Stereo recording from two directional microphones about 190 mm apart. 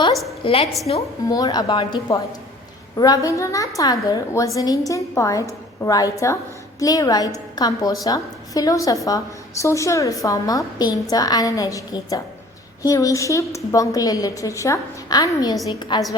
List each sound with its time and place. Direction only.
0.4 s a woman's voice: 25° left (ahead or behind)